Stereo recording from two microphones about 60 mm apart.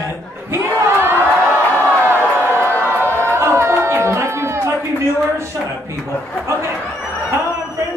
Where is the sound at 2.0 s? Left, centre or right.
Right.